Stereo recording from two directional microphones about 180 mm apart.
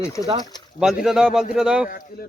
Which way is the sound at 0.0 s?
15° left (ahead or behind).